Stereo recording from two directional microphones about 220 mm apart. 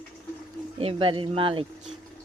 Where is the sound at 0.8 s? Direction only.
25° right (ahead or behind).